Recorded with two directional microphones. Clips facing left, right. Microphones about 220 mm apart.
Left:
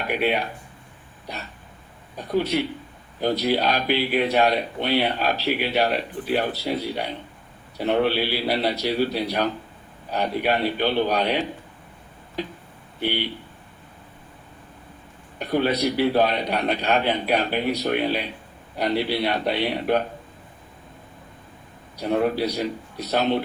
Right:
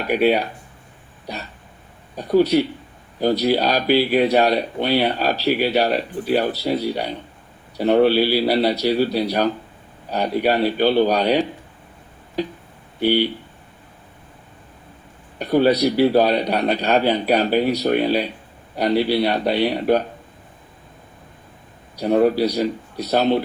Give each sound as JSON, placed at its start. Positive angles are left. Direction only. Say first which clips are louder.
{"t": 0.1, "sound": "speech", "louder": "right 7 dB", "side_deg": -35}
{"t": 2.1, "sound": "speech", "louder": "right 7 dB", "side_deg": -35}
{"t": 15.4, "sound": "speech", "louder": "right 6 dB", "side_deg": -35}
{"t": 21.9, "sound": "speech", "louder": "right 6 dB", "side_deg": -35}